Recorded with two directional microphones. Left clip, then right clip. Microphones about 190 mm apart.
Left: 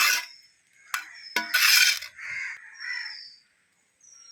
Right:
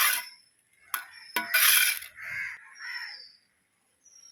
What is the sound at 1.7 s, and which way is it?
Coin, 5° right (ahead or behind).